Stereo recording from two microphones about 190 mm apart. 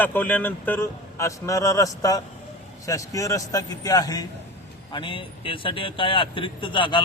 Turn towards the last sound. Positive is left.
turn(degrees=25)  # may be behind; listen again after turning